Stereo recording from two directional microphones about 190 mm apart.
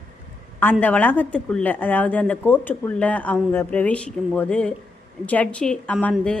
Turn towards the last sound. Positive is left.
turn(degrees=5)  # may be behind; listen again after turning